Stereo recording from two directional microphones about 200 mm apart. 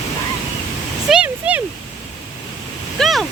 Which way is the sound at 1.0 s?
5° right (ahead or behind).